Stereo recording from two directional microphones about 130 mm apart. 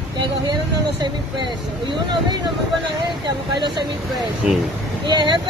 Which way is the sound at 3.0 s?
35° right (ahead or behind).